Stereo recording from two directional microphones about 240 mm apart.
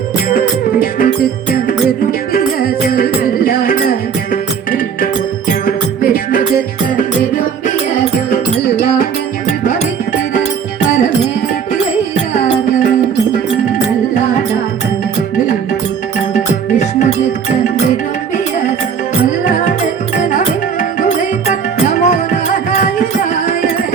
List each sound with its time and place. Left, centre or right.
0.3 s music: left
2.3 s music: left
5.5 s music: left
16.3 s music: left
19.5 s music: left
21.0 s music: left